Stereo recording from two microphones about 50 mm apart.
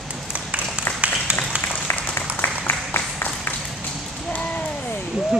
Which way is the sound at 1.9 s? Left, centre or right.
Left.